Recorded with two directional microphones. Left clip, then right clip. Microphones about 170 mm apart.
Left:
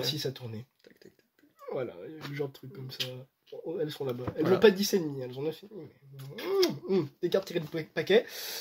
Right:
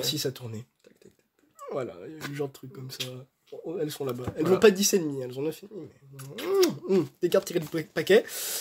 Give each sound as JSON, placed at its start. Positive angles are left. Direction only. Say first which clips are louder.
{"t": 0.0, "sound": "speech", "louder": "right 3 dB", "side_deg": -35}
{"t": 1.6, "sound": "speech", "louder": "right 2 dB", "side_deg": -25}